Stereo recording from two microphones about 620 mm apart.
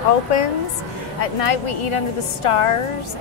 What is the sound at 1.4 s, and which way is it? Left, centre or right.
A woman's voice, left.